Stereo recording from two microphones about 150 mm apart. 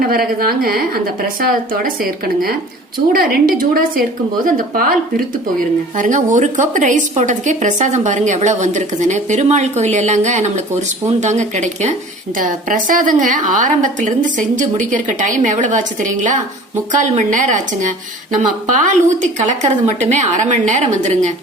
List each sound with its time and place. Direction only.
0.0 s a woman's voice: 80° right
6.0 s a woman's voice: 55° right (ahead or behind)
12.4 s a woman's voice: 65° right (ahead or behind)